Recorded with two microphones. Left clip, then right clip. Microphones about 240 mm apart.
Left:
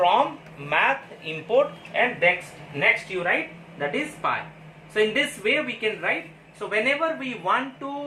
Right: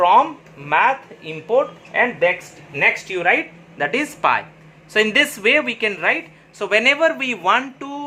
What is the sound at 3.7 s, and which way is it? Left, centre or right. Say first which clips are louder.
A woman's voice: right 7 dB; right.